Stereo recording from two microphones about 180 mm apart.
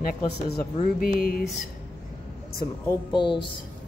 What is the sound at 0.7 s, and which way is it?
Speech, 50° left (ahead or behind).